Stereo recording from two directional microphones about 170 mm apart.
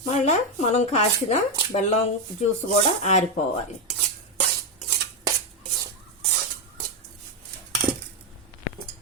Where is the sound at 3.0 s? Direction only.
40° left (ahead or behind).